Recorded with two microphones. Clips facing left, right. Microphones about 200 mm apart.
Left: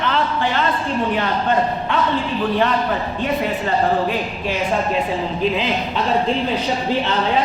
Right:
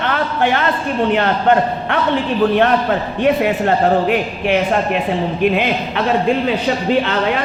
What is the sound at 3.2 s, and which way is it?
A man's voice, 70° right (ahead or behind).